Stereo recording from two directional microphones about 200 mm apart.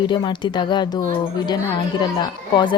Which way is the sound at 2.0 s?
20° left (ahead or behind).